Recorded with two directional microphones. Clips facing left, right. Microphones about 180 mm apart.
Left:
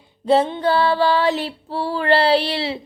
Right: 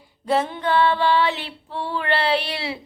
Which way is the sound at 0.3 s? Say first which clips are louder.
Left 5 dB; 25° left (ahead or behind).